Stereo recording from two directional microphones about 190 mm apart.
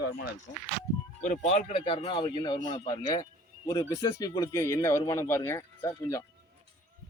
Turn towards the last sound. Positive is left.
turn(degrees=15)  # may be behind; listen again after turning